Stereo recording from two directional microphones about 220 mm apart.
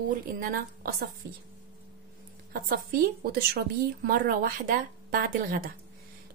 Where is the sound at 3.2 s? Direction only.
45° right (ahead or behind).